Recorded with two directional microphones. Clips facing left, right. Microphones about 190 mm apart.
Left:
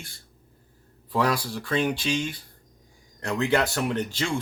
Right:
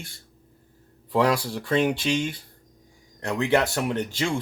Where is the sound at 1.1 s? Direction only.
25° right (ahead or behind).